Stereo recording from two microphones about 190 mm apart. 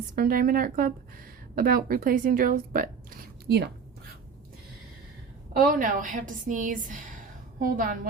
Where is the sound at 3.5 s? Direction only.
60° right (ahead or behind).